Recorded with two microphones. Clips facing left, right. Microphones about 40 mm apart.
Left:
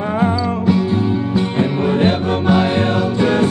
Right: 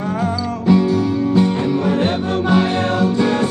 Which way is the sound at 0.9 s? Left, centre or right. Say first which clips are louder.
Right 1 dB; left.